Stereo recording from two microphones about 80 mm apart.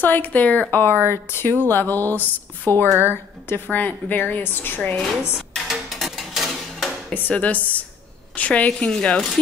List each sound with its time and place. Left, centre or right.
0.0 s speech: left
2.9 s a woman's voice: right
3.4 s speech: left
5.7 s music: centre
7.2 s speech: centre